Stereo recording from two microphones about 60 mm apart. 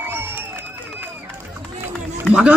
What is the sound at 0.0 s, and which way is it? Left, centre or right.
Crowd, right.